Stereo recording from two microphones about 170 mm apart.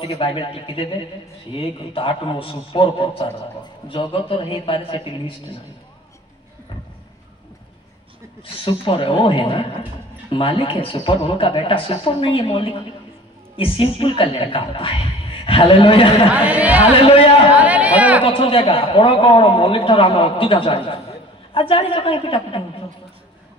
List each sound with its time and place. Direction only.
0.0 s a man's voice: 30° left (ahead or behind)
8.4 s a man's voice: 30° left (ahead or behind)
16.3 s speech: 10° right (ahead or behind)
17.0 s a man's voice: 35° left (ahead or behind)
17.5 s chatter: 10° right (ahead or behind)
18.2 s a man's voice: 30° left (ahead or behind)